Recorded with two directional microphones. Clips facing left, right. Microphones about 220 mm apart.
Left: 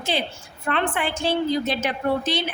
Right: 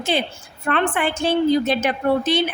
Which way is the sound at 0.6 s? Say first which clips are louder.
Right 4 dB; 55° right (ahead or behind).